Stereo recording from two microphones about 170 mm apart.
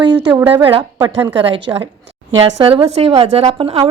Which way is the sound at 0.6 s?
30° right (ahead or behind).